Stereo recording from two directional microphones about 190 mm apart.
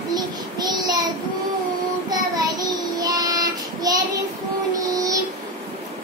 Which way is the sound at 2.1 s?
20° right (ahead or behind).